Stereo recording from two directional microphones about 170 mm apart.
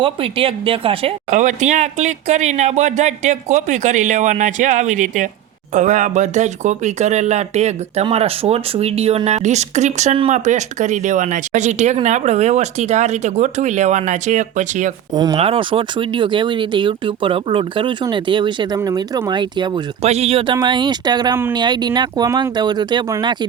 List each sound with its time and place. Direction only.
0.0 s speech: 30° right (ahead or behind)
1.3 s speech: 45° right (ahead or behind)
15.1 s speech: 25° right (ahead or behind)
20.1 s speech: 40° right (ahead or behind)